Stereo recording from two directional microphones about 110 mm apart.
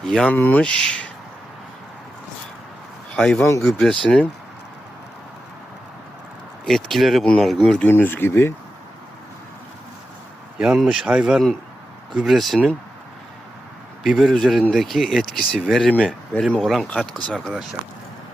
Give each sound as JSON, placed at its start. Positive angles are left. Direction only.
{"t": 0.0, "sound": "speech", "side_deg": 5}
{"t": 3.1, "sound": "speech", "side_deg": 10}
{"t": 3.4, "sound": "speech", "side_deg": 20}
{"t": 3.8, "sound": "speech", "side_deg": 5}
{"t": 6.7, "sound": "speech", "side_deg": 5}
{"t": 7.9, "sound": "speech", "side_deg": 20}
{"t": 10.6, "sound": "speech", "side_deg": -5}
{"t": 14.0, "sound": "speech", "side_deg": 0}